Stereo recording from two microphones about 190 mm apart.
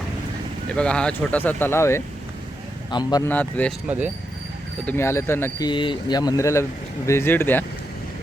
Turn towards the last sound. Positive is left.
turn(degrees=10)  # may be behind; listen again after turning